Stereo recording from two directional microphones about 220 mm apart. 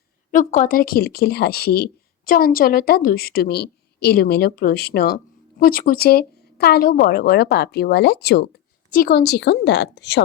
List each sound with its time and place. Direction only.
0.3 s speech: 35° left (ahead or behind)